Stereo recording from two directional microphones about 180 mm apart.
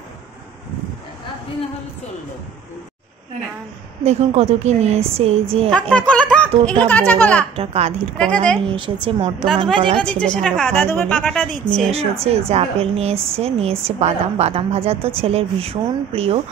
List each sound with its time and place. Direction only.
4.0 s speech: 35° right (ahead or behind)
5.7 s speech: 5° left (ahead or behind)
7.5 s speech: 35° right (ahead or behind)
8.2 s a woman's voice: 5° left (ahead or behind)
8.6 s a woman's voice: 25° right (ahead or behind)
9.9 s a woman's voice: 5° left (ahead or behind)
11.9 s speech: 35° right (ahead or behind)